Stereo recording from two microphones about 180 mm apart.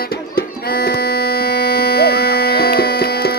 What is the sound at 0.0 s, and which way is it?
Music, 55° left (ahead or behind).